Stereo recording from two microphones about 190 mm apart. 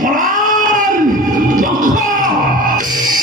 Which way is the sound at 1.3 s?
45° right (ahead or behind).